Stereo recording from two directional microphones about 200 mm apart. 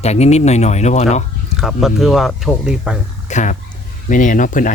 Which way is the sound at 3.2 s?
35° left (ahead or behind).